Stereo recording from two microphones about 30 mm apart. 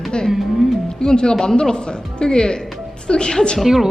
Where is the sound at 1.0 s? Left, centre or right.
Left.